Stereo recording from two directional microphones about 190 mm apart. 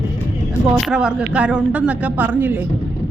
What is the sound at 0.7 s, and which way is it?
Speech, centre (ahead or behind).